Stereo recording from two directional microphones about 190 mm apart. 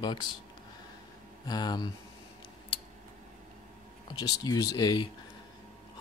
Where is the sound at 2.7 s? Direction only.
30° left (ahead or behind).